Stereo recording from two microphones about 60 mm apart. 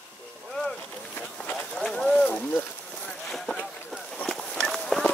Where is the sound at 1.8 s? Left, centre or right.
Centre.